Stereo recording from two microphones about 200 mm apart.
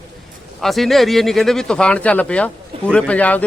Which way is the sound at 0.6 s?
Centre (ahead or behind).